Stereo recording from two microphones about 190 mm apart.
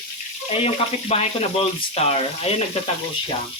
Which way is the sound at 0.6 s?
30° left (ahead or behind).